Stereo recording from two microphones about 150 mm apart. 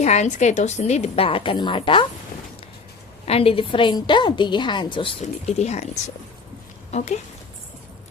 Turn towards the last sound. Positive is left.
turn(degrees=50)  # may be behind; listen again after turning